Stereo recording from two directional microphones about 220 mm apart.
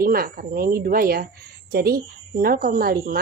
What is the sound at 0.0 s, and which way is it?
A woman's voice, 40° right (ahead or behind).